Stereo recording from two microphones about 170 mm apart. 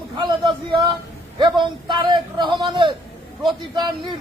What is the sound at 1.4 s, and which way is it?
A man's voice, 25° right (ahead or behind).